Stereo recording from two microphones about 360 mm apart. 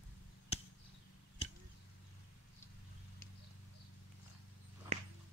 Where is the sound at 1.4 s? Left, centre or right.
Centre.